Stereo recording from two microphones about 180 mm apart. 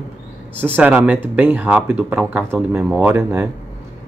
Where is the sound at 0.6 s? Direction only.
10° right (ahead or behind).